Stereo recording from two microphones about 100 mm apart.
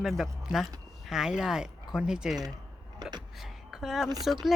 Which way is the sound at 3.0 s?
45° right (ahead or behind).